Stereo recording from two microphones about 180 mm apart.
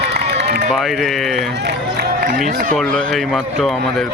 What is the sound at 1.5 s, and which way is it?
Speech, 65° right (ahead or behind).